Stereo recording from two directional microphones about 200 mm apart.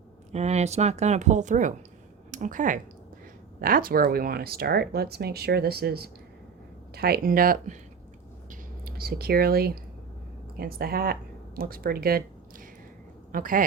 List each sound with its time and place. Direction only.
0.3 s speech: 35° right (ahead or behind)
8.4 s a sound: 50° right (ahead or behind)
10.6 s speech: 50° right (ahead or behind)